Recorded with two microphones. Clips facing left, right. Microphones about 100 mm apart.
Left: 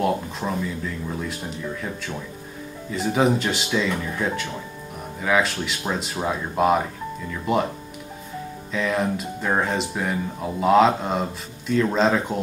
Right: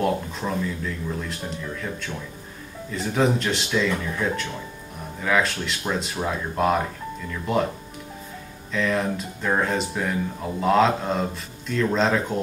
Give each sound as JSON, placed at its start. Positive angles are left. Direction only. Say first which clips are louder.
{"t": 0.0, "sound": "speech", "louder": "left 1 dB", "side_deg": 5}
{"t": 1.8, "sound": "speech", "louder": "left 1 dB", "side_deg": 5}
{"t": 8.7, "sound": "speech", "louder": "even", "side_deg": 5}